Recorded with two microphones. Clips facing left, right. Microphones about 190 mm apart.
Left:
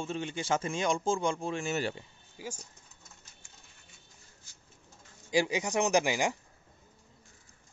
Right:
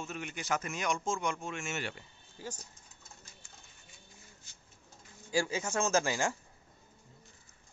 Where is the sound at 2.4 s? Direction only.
10° left (ahead or behind).